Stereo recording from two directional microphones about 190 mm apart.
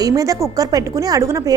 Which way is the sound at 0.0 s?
20° right (ahead or behind).